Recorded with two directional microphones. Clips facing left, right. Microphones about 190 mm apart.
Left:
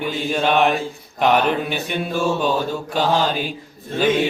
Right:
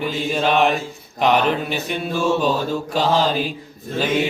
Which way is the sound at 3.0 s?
Centre (ahead or behind).